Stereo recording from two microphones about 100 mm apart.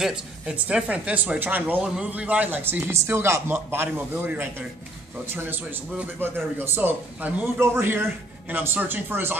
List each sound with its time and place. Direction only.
0.0 s a man's voice: 10° right (ahead or behind)